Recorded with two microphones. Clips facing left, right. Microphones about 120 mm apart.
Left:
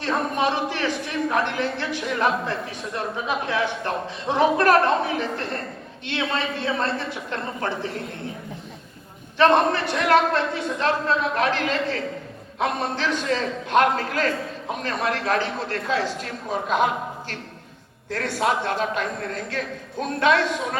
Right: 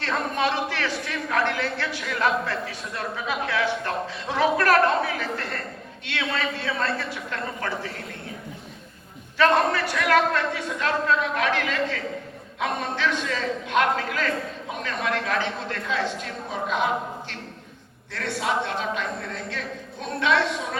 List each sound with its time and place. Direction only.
0.0 s a man's voice: 15° left (ahead or behind)
9.4 s a man's voice: 25° left (ahead or behind); by 20.4 s 50° left (ahead or behind)